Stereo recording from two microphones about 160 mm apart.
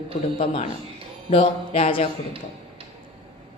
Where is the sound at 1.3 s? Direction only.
35° left (ahead or behind).